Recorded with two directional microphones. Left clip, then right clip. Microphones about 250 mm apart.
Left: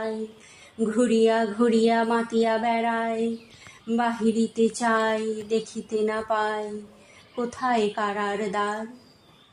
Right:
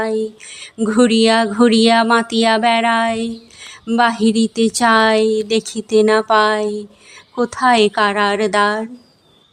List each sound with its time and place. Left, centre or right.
0.8 s speech: right